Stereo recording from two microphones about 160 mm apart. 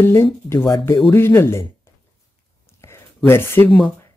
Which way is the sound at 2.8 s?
15° left (ahead or behind).